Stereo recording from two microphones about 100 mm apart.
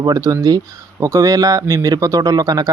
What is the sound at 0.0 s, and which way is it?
Speech, 35° right (ahead or behind).